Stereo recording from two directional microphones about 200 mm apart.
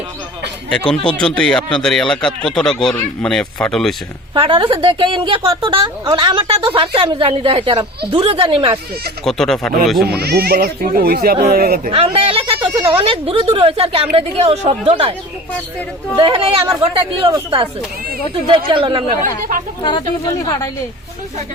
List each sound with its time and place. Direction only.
1.2 s speech: 5° left (ahead or behind)
4.4 s a woman's voice: 25° right (ahead or behind)
9.2 s speech: centre (ahead or behind)
10.0 s speech: 50° right (ahead or behind)
11.9 s a woman's voice: 25° right (ahead or behind)
16.1 s a woman's voice: 25° right (ahead or behind)
19.8 s speech: 20° left (ahead or behind)